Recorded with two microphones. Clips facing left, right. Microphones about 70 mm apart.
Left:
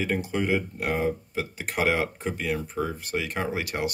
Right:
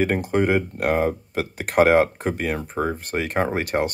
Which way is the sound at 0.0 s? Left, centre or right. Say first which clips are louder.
Right 7 dB; right.